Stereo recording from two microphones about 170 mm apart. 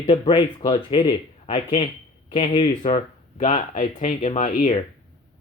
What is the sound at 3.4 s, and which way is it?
Speech, 40° left (ahead or behind).